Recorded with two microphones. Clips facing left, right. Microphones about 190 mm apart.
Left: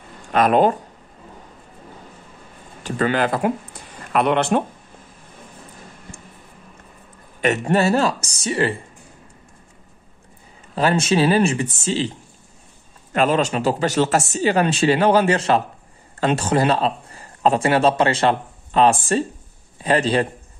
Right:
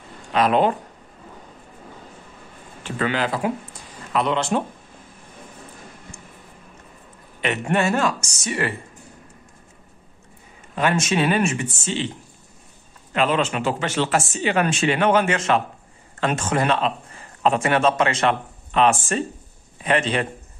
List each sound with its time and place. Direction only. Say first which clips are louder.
0.3 s speech: left 3 dB; 50° left (ahead or behind)
2.8 s speech: left 4 dB; 45° left (ahead or behind)
7.3 s speech: left 4 dB; 40° left (ahead or behind)
10.7 s speech: left 3 dB; 35° left (ahead or behind)
13.1 s a man's voice: left 3 dB; 40° left (ahead or behind)